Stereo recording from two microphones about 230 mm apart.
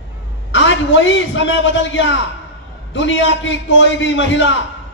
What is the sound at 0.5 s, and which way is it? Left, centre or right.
A man's voice, left.